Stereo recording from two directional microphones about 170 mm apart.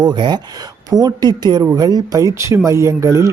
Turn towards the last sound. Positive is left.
turn(degrees=-20)  # may be behind; listen again after turning